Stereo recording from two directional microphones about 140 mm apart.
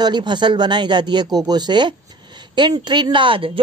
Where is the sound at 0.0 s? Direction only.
30° right (ahead or behind).